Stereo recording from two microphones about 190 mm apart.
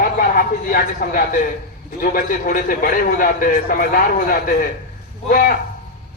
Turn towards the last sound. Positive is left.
turn(degrees=50)  # may be behind; listen again after turning